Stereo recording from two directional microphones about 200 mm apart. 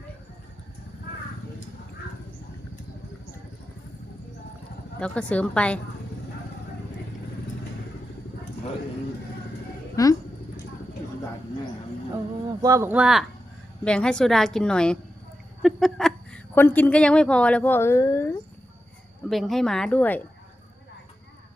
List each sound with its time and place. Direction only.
4.9 s a woman's voice: 5° left (ahead or behind)
9.9 s a sound: 15° left (ahead or behind)
12.6 s a woman's voice: 15° right (ahead or behind); by 18.3 s 10° left (ahead or behind)
19.3 s a woman's voice: centre (ahead or behind)